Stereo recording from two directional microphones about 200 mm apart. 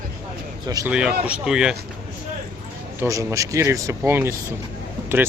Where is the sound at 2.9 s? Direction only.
15° right (ahead or behind).